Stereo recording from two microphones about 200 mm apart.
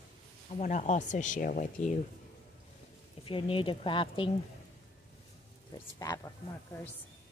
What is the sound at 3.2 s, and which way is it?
Speech, 25° left (ahead or behind).